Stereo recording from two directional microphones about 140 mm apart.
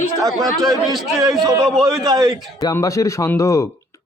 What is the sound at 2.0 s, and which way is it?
Speech, 30° right (ahead or behind).